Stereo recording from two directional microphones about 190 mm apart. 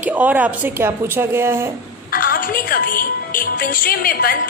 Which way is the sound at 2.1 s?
50° left (ahead or behind).